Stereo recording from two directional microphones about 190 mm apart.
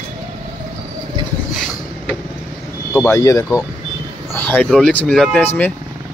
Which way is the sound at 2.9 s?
15° left (ahead or behind).